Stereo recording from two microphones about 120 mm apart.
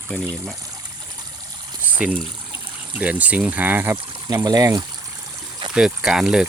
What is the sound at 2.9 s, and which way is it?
Speech, 15° right (ahead or behind).